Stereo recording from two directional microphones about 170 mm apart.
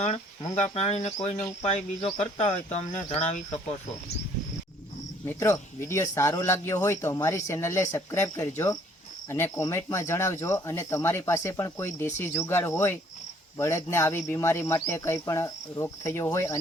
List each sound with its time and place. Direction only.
0.0 s speech: 45° left (ahead or behind)
5.2 s speech: 15° left (ahead or behind)